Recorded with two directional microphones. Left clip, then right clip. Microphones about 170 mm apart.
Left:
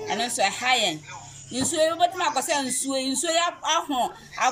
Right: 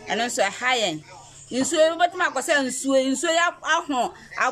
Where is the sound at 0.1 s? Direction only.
Centre (ahead or behind).